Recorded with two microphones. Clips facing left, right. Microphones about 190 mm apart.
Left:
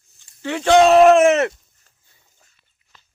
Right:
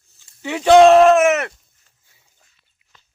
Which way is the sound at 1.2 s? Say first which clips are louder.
Left 2 dB; 30° left (ahead or behind).